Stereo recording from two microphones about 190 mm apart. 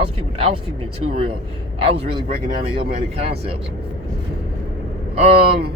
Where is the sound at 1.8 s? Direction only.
30° right (ahead or behind).